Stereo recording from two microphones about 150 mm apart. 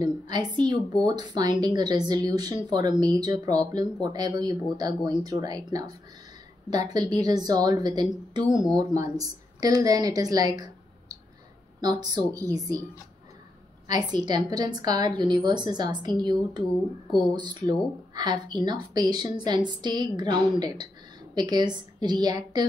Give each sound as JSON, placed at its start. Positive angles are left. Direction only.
{"t": 0.0, "sound": "a woman's voice", "side_deg": -30}
{"t": 13.8, "sound": "a woman's voice", "side_deg": -25}